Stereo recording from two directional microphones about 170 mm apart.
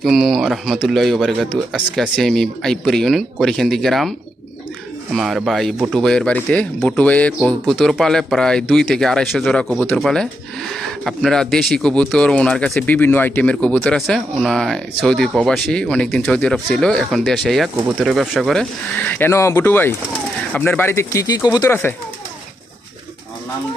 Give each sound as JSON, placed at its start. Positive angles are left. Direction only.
{"t": 0.0, "sound": "speech", "side_deg": 0}
{"t": 5.1, "sound": "speech", "side_deg": 0}